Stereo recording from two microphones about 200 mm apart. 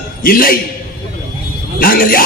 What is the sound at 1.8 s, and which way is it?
Speech, 45° left (ahead or behind).